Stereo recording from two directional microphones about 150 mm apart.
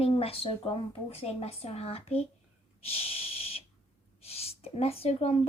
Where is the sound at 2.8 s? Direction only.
40° left (ahead or behind).